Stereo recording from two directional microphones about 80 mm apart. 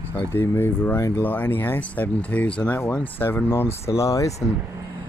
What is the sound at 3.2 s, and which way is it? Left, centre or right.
Speech, left.